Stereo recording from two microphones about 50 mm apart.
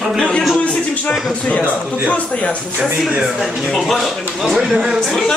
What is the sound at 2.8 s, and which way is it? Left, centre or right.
Speech, centre.